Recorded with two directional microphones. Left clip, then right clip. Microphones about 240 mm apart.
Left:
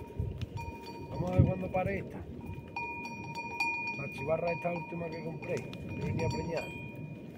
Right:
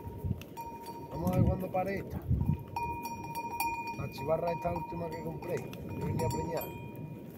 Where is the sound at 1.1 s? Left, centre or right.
Centre.